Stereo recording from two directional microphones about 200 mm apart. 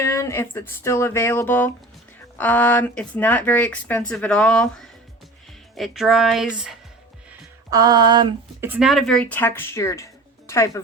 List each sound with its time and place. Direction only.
0.0 s speech: 15° left (ahead or behind); by 6.7 s centre (ahead or behind)
7.7 s speech: 20° right (ahead or behind)
8.7 s speech: centre (ahead or behind); by 10.7 s 15° left (ahead or behind)